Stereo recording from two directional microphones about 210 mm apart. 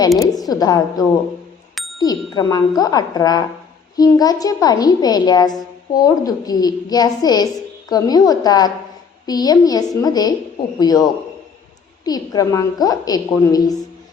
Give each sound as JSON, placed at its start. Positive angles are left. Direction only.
{"t": 0.3, "sound": "a woman's voice", "side_deg": 15}